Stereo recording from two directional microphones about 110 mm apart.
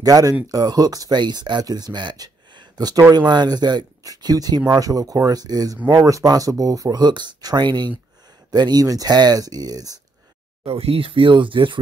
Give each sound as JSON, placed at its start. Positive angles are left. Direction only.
{"t": 0.0, "sound": "speech", "side_deg": -35}
{"t": 10.6, "sound": "speech", "side_deg": -65}